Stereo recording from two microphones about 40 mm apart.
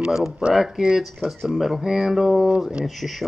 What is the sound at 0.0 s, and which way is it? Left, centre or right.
Speech, centre.